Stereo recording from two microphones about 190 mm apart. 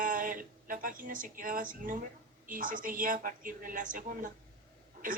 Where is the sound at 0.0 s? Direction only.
45° right (ahead or behind).